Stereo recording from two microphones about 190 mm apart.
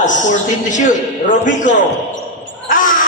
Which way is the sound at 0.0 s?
40° left (ahead or behind).